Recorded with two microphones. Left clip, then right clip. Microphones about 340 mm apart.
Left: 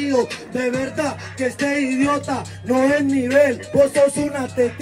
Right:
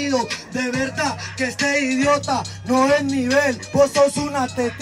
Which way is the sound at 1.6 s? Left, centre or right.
Right.